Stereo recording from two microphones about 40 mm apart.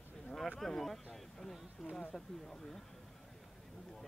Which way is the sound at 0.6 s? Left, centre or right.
Centre.